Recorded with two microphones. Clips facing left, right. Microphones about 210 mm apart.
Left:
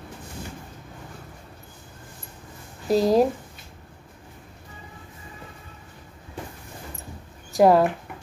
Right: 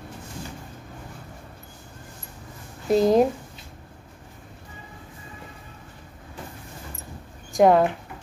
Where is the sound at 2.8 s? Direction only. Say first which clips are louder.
Right 1 dB; centre (ahead or behind).